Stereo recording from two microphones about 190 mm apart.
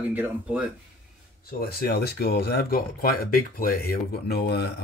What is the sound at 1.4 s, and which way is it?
Speech, 50° left (ahead or behind).